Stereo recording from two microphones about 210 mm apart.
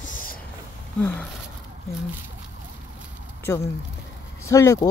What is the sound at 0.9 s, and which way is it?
Speech, 10° left (ahead or behind).